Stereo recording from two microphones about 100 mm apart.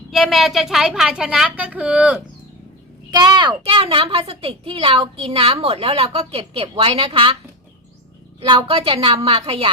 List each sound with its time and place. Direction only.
0.1 s a woman's voice: centre (ahead or behind)
3.1 s a child's voice: 40° right (ahead or behind)
3.6 s a woman's voice: 70° right (ahead or behind)
8.4 s a woman's voice: 65° right (ahead or behind)